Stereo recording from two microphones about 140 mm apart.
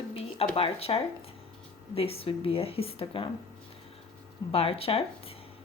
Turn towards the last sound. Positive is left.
turn(degrees=45)  # may be behind; listen again after turning